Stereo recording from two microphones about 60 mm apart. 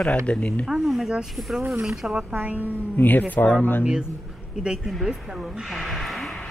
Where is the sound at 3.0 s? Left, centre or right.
Left.